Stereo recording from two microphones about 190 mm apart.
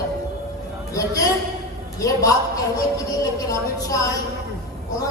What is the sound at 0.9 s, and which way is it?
A woman's voice, 20° left (ahead or behind).